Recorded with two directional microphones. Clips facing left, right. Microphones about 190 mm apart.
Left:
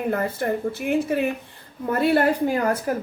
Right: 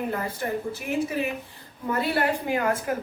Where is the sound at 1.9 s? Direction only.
55° left (ahead or behind).